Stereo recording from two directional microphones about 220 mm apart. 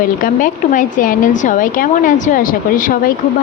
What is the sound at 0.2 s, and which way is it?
Speech, 35° left (ahead or behind).